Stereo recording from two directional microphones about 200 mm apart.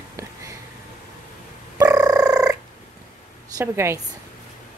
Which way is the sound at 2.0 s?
20° right (ahead or behind).